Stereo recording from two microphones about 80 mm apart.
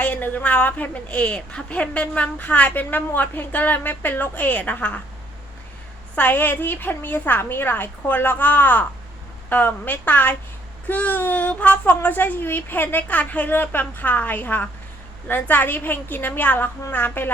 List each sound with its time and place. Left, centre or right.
0.0 s a woman's voice: left
6.1 s a woman's voice: left